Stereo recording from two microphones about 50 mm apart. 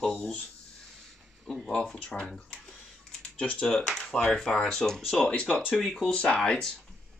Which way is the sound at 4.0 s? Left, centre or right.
Centre.